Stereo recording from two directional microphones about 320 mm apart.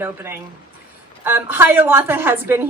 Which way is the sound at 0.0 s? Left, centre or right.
Centre.